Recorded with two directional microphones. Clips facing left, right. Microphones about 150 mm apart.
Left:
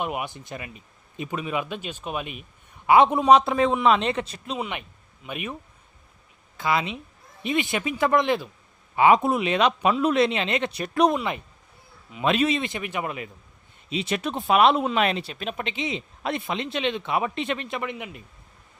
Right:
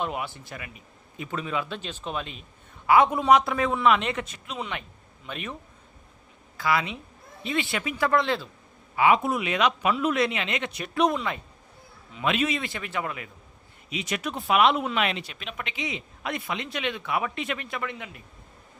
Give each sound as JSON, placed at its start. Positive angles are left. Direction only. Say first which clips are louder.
{"t": 0.0, "sound": "a man's voice", "louder": "left 1 dB", "side_deg": 15}
{"t": 4.5, "sound": "speech", "louder": "left 3 dB", "side_deg": 15}
{"t": 6.6, "sound": "speech", "louder": "left 1 dB", "side_deg": 20}
{"t": 9.0, "sound": "speech", "louder": "left 3 dB", "side_deg": 30}
{"t": 11.1, "sound": "speech", "louder": "left 3 dB", "side_deg": 20}
{"t": 12.2, "sound": "speech", "louder": "left 4 dB", "side_deg": 35}